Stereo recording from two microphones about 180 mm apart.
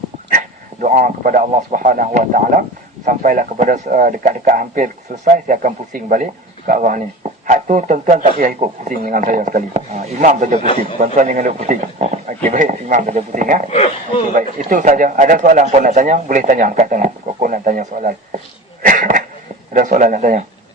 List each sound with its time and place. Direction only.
0.3 s a man's voice: 45° right (ahead or behind)
13.7 s speech: 35° left (ahead or behind)
14.3 s speech: 45° right (ahead or behind)
18.8 s a sound: 50° right (ahead or behind)
19.7 s speech: 45° right (ahead or behind)